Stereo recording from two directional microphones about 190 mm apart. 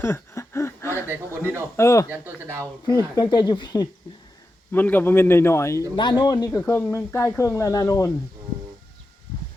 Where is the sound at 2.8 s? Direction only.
20° left (ahead or behind).